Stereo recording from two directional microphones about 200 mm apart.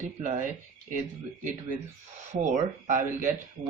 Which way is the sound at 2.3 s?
40° right (ahead or behind).